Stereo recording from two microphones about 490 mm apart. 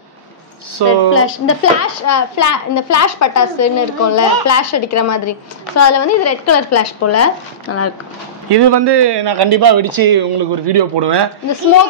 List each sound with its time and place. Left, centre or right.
0.8 s a man's voice: right
1.1 s a child's voice: left
8.5 s a man's voice: right